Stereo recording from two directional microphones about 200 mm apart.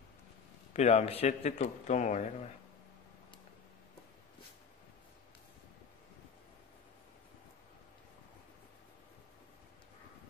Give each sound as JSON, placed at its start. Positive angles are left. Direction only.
{"t": 0.7, "sound": "a man's voice", "side_deg": 35}